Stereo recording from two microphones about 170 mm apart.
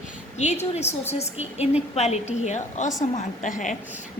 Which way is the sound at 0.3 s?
40° left (ahead or behind).